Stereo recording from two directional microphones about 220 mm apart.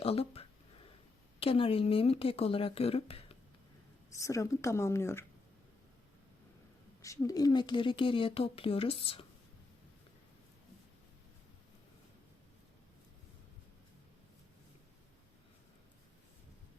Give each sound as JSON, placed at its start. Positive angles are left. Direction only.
{"t": 0.0, "sound": "a sound", "side_deg": 25}
{"t": 1.4, "sound": "speech", "side_deg": 25}
{"t": 4.2, "sound": "speech", "side_deg": 15}
{"t": 7.0, "sound": "speech", "side_deg": 15}